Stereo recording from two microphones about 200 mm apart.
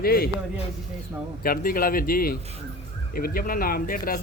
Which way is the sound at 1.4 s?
45° left (ahead or behind).